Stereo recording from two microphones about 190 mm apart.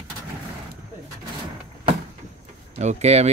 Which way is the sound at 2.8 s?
35° right (ahead or behind).